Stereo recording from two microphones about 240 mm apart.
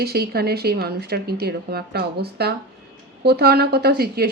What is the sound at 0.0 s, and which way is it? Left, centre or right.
Speech, right.